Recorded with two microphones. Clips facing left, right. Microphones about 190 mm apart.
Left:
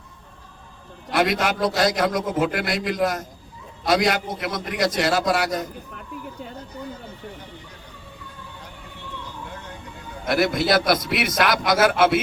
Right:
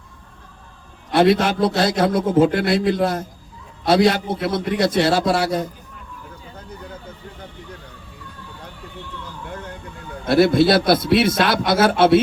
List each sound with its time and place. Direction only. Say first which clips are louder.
1.1 s a man's voice: right 6 dB; 30° right (ahead or behind)
10.2 s a man's voice: right 6 dB; 30° right (ahead or behind)